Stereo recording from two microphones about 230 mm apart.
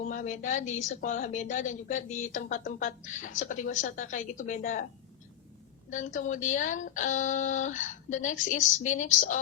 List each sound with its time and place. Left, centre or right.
0.0 s a woman's voice: left
5.9 s a woman's voice: left